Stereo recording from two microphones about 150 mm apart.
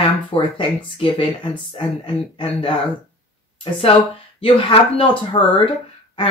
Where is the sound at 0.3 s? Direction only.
35° left (ahead or behind).